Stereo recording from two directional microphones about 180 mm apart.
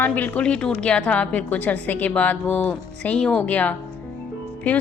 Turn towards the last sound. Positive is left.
turn(degrees=10)  # may be behind; listen again after turning